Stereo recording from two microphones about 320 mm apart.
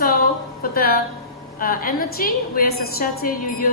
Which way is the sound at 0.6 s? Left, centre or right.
Left.